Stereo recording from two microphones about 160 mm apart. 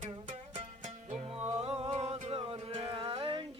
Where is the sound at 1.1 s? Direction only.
40° right (ahead or behind).